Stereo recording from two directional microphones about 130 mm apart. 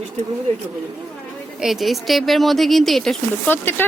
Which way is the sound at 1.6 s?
Centre (ahead or behind).